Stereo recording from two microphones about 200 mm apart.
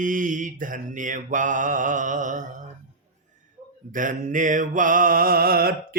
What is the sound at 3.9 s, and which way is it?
Mantra, 40° right (ahead or behind).